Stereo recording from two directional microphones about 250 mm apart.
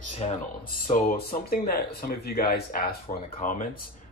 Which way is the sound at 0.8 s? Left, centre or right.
Left.